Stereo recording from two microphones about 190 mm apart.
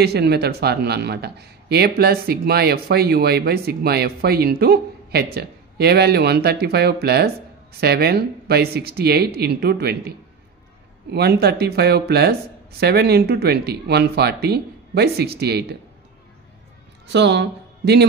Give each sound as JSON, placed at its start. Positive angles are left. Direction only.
{"t": 0.0, "sound": "speech", "side_deg": -60}
{"t": 17.1, "sound": "speech", "side_deg": -65}